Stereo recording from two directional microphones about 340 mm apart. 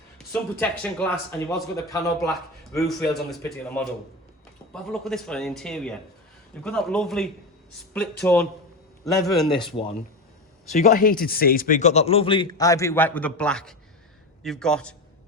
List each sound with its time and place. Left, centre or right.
0.3 s speech: centre
10.7 s a man's voice: left; by 14.9 s centre